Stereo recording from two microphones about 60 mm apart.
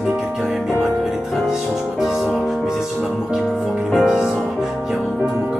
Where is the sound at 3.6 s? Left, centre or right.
Centre.